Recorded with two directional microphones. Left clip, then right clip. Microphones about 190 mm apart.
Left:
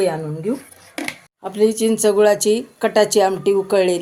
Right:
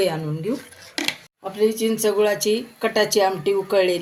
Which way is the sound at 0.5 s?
40° left (ahead or behind).